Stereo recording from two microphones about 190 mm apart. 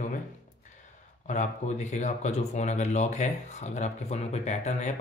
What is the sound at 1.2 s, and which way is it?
Speech, 40° left (ahead or behind).